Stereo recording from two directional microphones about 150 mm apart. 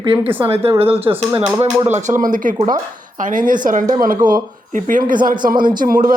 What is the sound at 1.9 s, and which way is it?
A man's voice, 55° right (ahead or behind).